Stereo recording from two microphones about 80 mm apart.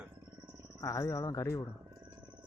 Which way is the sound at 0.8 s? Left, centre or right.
Left.